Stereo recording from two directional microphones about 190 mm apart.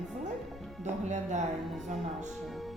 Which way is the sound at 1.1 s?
40° right (ahead or behind).